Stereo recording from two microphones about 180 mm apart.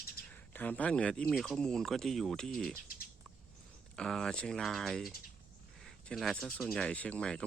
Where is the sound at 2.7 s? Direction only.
55° left (ahead or behind).